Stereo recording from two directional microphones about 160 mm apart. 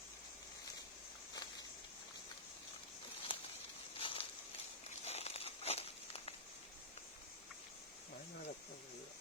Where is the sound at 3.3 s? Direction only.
35° left (ahead or behind).